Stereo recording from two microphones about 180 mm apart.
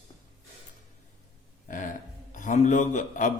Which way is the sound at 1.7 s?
45° left (ahead or behind).